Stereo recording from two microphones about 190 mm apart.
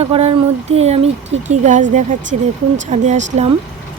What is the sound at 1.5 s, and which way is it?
Speech, 40° right (ahead or behind).